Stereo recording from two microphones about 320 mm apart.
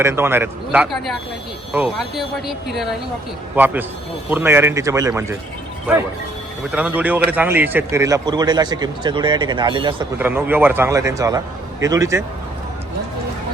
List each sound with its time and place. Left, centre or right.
0.0 s speech: centre
6.7 s speech: centre